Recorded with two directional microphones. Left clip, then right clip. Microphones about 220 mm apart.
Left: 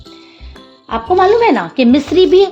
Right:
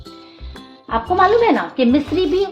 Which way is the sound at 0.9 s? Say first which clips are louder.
Left 3 dB; 50° left (ahead or behind).